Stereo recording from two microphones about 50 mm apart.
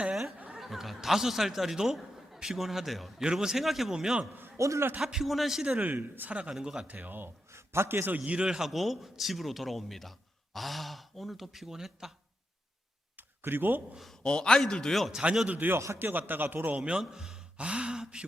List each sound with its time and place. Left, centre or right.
0.5 s a man's voice: centre
4.5 s a man's voice: right
4.9 s a man's voice: centre
5.8 s a man's voice: right
6.5 s a man's voice: centre
6.8 s a man's voice: right
7.5 s a sound: right
8.1 s speech: right
8.7 s a man's voice: centre
13.1 s a sound: right
14.3 s a man's voice: centre
15.1 s speech: right
15.4 s a man's voice: right
16.8 s a man's voice: centre